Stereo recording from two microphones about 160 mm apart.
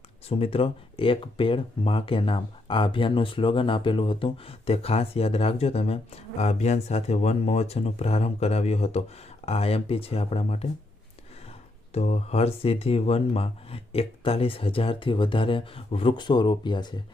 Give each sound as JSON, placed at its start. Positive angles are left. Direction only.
{"t": 0.3, "sound": "speech", "side_deg": 40}
{"t": 11.9, "sound": "speech", "side_deg": 40}